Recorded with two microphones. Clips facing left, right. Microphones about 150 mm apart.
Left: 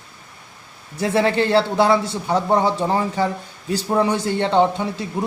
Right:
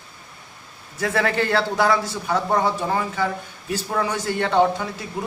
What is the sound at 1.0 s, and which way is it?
A man's voice, 25° left (ahead or behind).